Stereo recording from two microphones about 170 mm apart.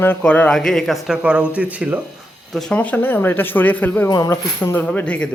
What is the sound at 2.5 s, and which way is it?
Speech, 5° left (ahead or behind).